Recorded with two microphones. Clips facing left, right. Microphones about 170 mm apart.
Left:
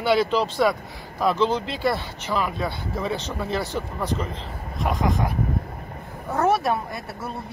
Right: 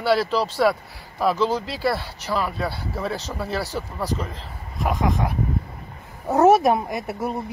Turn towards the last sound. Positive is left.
turn(degrees=-20)  # may be behind; listen again after turning